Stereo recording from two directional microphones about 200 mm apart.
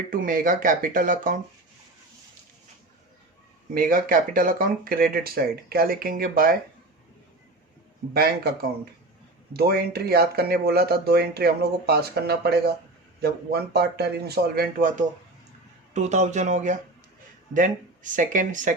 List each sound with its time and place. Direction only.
0.1 s speech: 45° right (ahead or behind)
3.8 s speech: 45° right (ahead or behind)
9.5 s speech: 50° right (ahead or behind)